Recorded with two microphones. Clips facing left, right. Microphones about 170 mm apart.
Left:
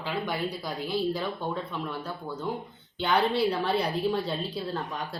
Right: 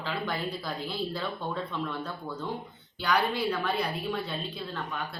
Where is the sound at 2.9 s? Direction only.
25° left (ahead or behind).